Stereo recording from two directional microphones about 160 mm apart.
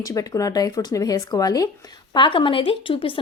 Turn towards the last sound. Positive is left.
turn(degrees=35)  # may be behind; listen again after turning